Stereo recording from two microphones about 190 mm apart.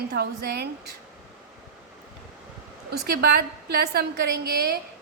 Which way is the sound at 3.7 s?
55° right (ahead or behind).